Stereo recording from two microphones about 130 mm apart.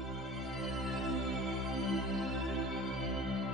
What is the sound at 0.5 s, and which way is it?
Music, centre (ahead or behind).